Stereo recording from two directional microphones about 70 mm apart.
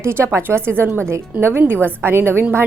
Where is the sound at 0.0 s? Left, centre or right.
Right.